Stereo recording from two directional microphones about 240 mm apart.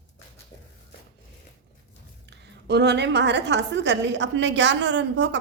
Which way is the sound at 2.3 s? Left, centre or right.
Right.